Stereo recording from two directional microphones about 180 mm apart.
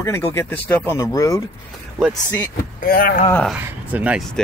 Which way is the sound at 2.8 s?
55° left (ahead or behind).